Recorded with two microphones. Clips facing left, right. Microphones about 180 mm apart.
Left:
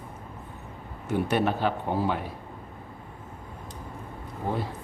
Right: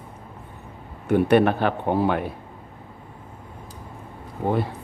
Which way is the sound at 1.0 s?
60° right (ahead or behind).